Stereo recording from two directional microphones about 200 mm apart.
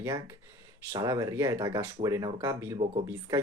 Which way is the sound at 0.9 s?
15° right (ahead or behind).